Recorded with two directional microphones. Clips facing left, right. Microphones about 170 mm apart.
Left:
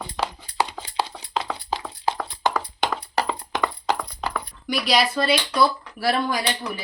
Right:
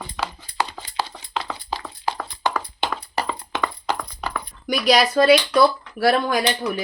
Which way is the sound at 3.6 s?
5° left (ahead or behind).